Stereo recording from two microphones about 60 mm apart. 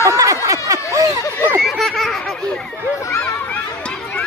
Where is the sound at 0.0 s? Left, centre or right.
Right.